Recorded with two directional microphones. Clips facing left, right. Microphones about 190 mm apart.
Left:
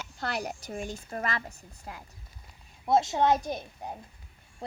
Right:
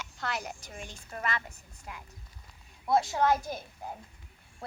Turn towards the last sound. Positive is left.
turn(degrees=20)  # may be behind; listen again after turning